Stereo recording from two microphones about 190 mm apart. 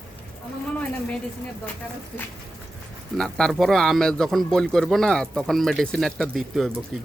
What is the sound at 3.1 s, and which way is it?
A man's voice, 5° left (ahead or behind).